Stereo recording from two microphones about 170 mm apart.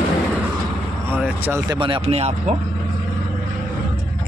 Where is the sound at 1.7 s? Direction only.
30° right (ahead or behind).